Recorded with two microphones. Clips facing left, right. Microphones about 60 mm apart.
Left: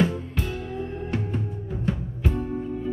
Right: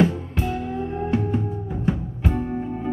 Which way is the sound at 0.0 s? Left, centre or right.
Right.